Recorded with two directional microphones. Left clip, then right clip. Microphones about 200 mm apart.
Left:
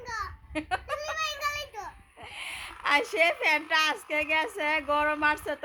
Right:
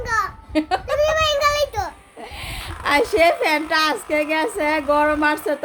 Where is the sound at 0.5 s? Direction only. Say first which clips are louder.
Right 11 dB; centre (ahead or behind).